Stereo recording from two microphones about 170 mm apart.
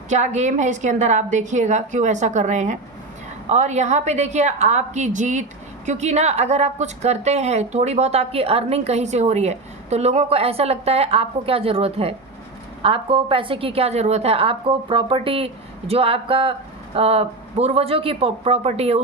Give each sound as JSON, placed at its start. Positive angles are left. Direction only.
{"t": 0.1, "sound": "a woman's voice", "side_deg": -45}